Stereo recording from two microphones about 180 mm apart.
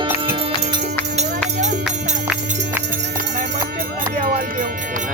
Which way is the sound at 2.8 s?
45° right (ahead or behind).